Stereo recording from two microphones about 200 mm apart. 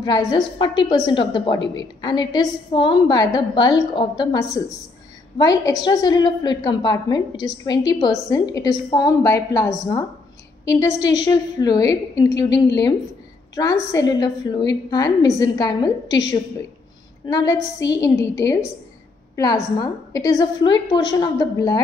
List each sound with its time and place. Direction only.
0.0 s a woman's voice: 20° left (ahead or behind)
13.6 s a woman's voice: 15° left (ahead or behind)